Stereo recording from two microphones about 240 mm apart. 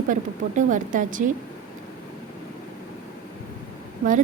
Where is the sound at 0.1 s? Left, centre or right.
Right.